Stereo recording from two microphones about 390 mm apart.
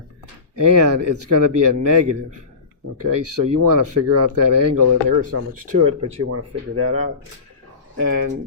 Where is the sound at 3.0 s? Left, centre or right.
Right.